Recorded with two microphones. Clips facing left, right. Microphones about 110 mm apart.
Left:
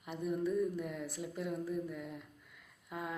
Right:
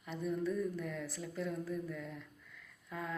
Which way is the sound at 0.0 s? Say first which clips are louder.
Left 1 dB; 15° left (ahead or behind).